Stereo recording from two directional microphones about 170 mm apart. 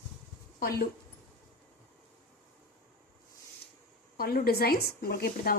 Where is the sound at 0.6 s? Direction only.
60° left (ahead or behind).